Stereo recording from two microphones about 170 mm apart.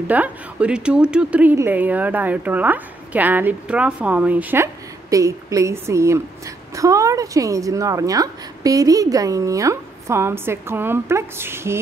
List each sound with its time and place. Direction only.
0.0 s a woman's voice: 10° right (ahead or behind)